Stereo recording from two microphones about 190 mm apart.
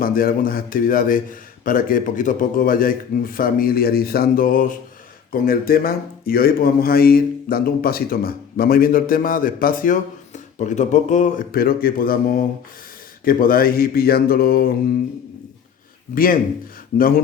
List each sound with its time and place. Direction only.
0.0 s speech: 50° left (ahead or behind)
16.1 s speech: 50° left (ahead or behind)